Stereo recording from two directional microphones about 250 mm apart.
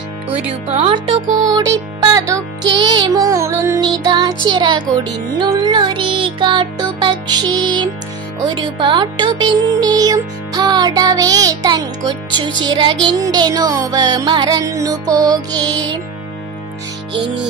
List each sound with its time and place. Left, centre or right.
0.5 s music: right